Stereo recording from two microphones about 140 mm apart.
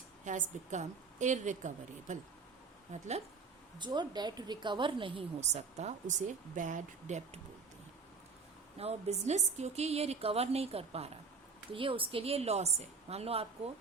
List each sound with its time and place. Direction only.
0.3 s a woman's voice: 60° right (ahead or behind)
3.8 s a woman's voice: 30° right (ahead or behind)
5.4 s a woman's voice: 55° right (ahead or behind)
6.6 s a woman's voice: 65° right (ahead or behind)
8.8 s a woman's voice: 50° right (ahead or behind)